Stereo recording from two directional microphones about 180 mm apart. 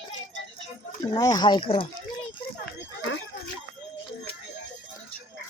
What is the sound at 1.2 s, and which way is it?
Speech, 20° left (ahead or behind).